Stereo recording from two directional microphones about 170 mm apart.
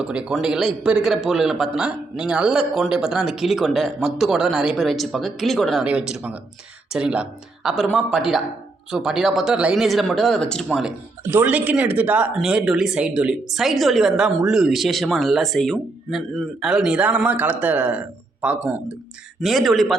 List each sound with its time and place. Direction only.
0.0 s speech: 5° right (ahead or behind)
8.9 s speech: 5° right (ahead or behind)
11.2 s speech: 15° right (ahead or behind)